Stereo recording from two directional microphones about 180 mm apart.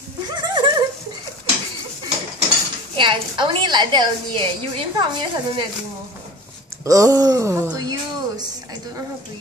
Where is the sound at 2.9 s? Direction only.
25° right (ahead or behind).